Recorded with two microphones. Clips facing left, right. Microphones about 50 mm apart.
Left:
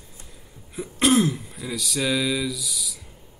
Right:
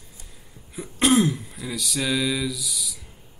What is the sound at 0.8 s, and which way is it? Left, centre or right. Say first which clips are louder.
Speech: even; centre.